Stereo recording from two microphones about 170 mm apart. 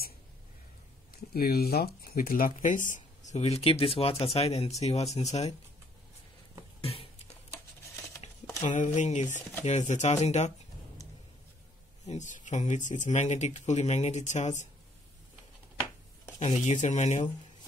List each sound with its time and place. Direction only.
1.3 s speech: 65° left (ahead or behind); by 5.2 s 40° left (ahead or behind)
6.8 s a sound: 35° left (ahead or behind)
8.6 s speech: 45° left (ahead or behind)
12.1 s speech: 45° left (ahead or behind)
16.3 s speech: 45° left (ahead or behind)